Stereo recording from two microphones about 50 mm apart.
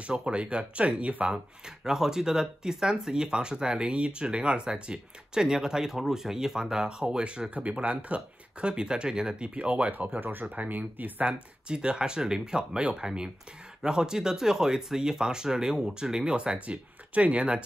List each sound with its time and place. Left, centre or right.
0.0 s speech: right
1.9 s speech: centre